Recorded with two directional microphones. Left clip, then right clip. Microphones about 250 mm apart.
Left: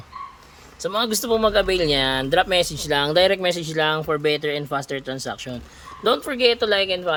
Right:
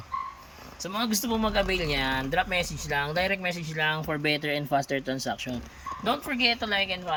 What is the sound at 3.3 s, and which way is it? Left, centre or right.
Speech, centre.